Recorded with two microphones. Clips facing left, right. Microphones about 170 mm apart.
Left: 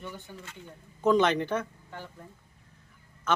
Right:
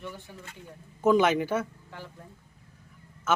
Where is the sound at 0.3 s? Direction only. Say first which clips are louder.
Even; 10° right (ahead or behind).